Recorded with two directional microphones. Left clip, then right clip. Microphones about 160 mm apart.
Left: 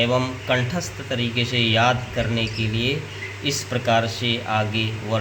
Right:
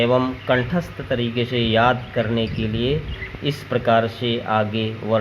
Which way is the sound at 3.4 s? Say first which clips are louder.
Right 2 dB; 40° right (ahead or behind).